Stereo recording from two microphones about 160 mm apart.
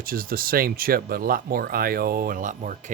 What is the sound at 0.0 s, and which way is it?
Speech, 65° right (ahead or behind).